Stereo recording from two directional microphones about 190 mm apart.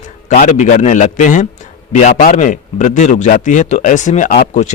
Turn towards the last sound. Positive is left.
turn(degrees=45)  # may be behind; listen again after turning